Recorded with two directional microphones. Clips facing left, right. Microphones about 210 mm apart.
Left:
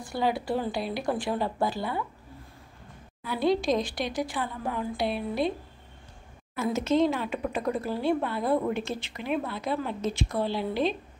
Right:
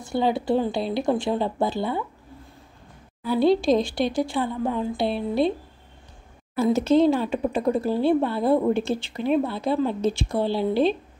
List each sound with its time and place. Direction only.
0.0 s speech: 25° right (ahead or behind)
3.3 s speech: 30° right (ahead or behind)
6.5 s speech: 35° right (ahead or behind)